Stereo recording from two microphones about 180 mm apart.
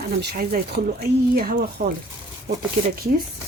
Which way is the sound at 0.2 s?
55° right (ahead or behind).